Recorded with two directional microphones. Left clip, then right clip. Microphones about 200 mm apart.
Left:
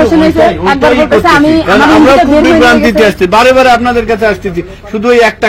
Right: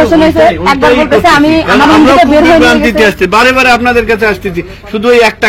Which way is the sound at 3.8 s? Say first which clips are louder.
Right 1 dB; 25° left (ahead or behind).